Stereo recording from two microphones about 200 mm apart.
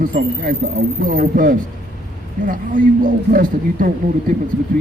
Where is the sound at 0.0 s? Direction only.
45° right (ahead or behind).